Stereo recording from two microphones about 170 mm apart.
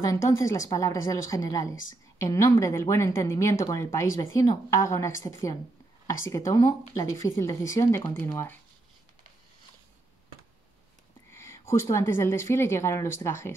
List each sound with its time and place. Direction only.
0.0 s speech: 20° left (ahead or behind)
11.3 s speech: 15° left (ahead or behind)